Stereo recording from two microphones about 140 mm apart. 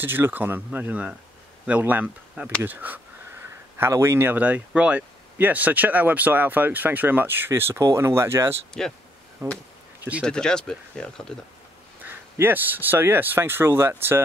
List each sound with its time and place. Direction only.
0.0 s speech: 15° right (ahead or behind)
8.8 s speech: 5° left (ahead or behind)
9.4 s speech: 25° right (ahead or behind)
10.2 s speech: 5° left (ahead or behind)
12.0 s speech: 15° right (ahead or behind)